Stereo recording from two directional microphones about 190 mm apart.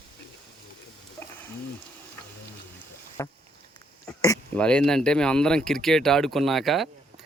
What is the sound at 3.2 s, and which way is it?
Boat, 15° left (ahead or behind).